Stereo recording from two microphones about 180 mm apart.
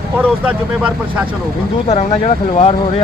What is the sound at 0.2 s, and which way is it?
Speech, 10° right (ahead or behind).